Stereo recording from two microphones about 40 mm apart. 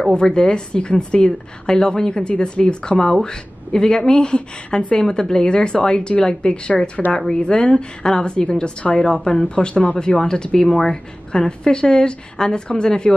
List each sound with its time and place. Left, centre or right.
0.1 s a woman's voice: left
9.8 s a woman's voice: left